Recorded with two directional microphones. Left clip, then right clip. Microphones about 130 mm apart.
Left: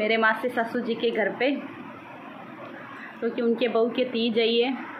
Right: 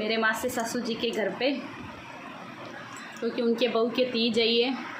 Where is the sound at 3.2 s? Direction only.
30° right (ahead or behind).